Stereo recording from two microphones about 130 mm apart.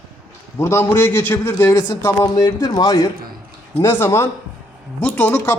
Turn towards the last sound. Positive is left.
turn(degrees=15)  # may be behind; listen again after turning